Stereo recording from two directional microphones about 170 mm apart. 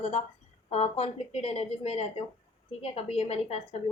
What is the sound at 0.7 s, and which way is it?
A woman's voice, 40° left (ahead or behind).